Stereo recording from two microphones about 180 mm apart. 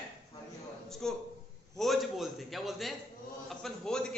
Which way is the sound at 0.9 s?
Centre (ahead or behind).